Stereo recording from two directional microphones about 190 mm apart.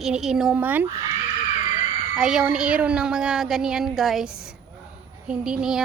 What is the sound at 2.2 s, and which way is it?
Speech, 5° right (ahead or behind).